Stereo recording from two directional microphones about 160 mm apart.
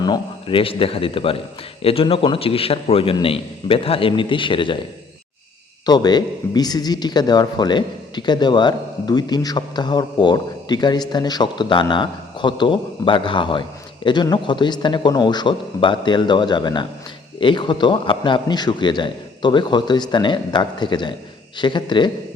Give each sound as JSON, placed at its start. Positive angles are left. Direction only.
{"t": 0.0, "sound": "a man's voice", "side_deg": 30}
{"t": 5.8, "sound": "a woman's voice", "side_deg": 25}